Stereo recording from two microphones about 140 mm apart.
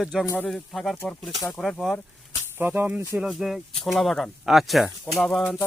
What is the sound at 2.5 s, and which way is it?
Speech, 15° right (ahead or behind).